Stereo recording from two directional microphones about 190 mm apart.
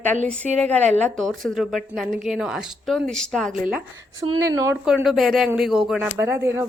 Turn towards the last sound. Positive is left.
turn(degrees=-10)  # may be behind; listen again after turning